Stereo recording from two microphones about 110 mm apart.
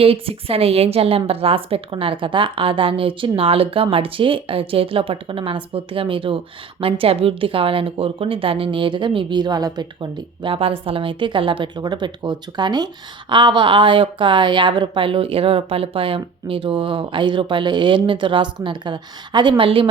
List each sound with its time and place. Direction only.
0.0 s a woman's voice: 60° right (ahead or behind)
11.8 s a woman's voice: 40° right (ahead or behind)